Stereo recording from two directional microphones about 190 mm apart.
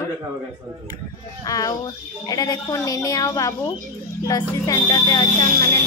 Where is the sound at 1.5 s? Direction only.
20° left (ahead or behind).